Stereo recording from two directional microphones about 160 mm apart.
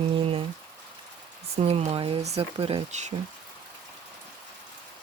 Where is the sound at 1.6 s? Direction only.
40° right (ahead or behind).